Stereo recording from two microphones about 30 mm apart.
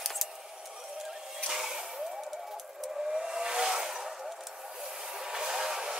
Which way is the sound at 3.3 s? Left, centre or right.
Right.